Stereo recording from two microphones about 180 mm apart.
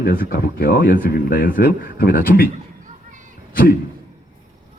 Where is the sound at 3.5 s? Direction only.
55° left (ahead or behind).